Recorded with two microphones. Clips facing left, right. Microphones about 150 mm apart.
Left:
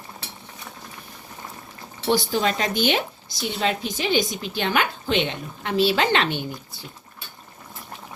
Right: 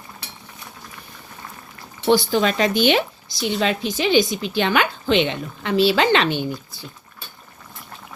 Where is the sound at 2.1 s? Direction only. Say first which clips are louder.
Right 4 dB; 90° right.